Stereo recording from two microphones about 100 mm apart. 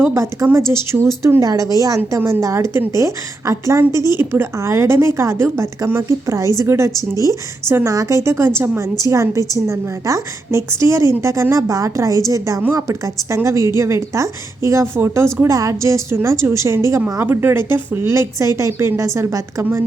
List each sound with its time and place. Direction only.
0.1 s a woman's voice: 30° right (ahead or behind)